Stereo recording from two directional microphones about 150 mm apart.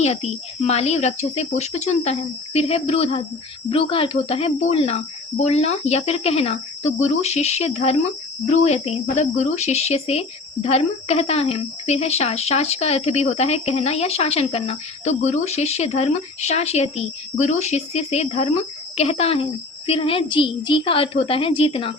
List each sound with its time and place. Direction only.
0.0 s a woman's voice: 45° left (ahead or behind)